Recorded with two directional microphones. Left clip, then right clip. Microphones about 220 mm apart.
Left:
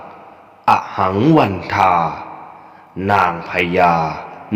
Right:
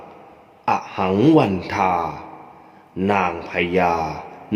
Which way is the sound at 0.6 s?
15° left (ahead or behind).